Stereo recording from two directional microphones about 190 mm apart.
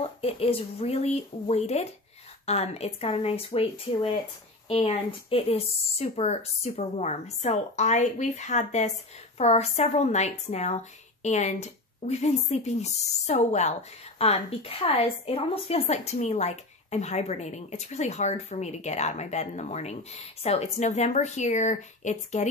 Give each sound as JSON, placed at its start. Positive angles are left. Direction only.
{"t": 0.0, "sound": "a woman's voice", "side_deg": 30}